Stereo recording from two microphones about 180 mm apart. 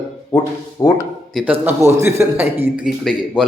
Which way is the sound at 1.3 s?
Centre (ahead or behind).